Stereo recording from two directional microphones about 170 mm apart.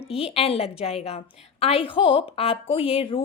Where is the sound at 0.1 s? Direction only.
35° left (ahead or behind).